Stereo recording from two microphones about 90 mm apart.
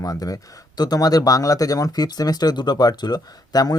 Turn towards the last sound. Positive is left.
turn(degrees=45)  # may be behind; listen again after turning